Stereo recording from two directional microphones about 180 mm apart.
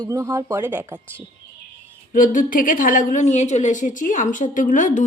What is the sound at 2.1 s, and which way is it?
A woman's voice, 50° left (ahead or behind).